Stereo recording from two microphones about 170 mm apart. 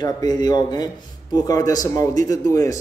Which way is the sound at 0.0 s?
25° left (ahead or behind).